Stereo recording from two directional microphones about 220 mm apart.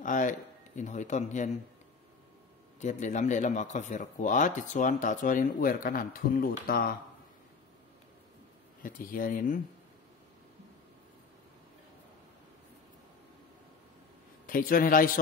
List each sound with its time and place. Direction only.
0.0 s speech: 35° left (ahead or behind)
2.8 s speech: 35° left (ahead or behind)
8.8 s speech: 40° left (ahead or behind)
14.4 s a man's voice: 40° left (ahead or behind)